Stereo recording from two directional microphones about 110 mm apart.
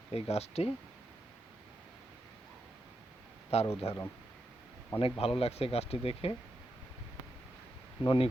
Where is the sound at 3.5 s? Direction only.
70° left (ahead or behind).